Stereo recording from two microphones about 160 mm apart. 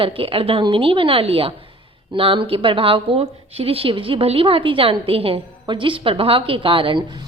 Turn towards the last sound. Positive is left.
turn(degrees=-35)  # may be behind; listen again after turning